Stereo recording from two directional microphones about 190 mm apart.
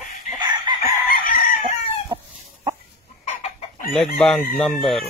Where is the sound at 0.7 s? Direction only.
20° right (ahead or behind).